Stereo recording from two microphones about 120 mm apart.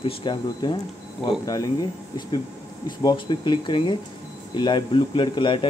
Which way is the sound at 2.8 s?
40° left (ahead or behind).